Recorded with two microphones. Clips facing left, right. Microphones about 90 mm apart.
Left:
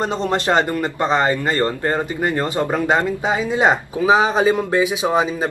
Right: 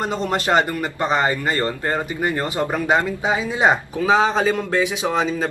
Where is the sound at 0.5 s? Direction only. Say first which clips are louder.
Even; 15° right (ahead or behind).